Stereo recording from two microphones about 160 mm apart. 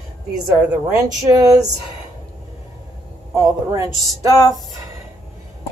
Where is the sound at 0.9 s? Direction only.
20° right (ahead or behind).